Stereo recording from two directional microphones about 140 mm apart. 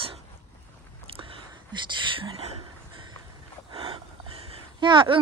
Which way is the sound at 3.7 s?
40° right (ahead or behind).